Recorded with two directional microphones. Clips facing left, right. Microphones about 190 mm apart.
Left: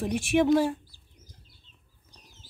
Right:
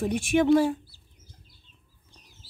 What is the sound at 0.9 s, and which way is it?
Chicken, 15° left (ahead or behind).